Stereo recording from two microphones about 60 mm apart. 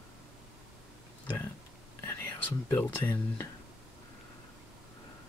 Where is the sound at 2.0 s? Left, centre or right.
Left.